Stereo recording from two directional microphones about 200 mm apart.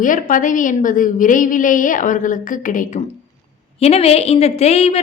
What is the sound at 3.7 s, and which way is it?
A woman's voice, 30° left (ahead or behind).